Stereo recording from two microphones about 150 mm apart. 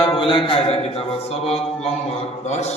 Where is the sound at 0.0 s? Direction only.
35° left (ahead or behind).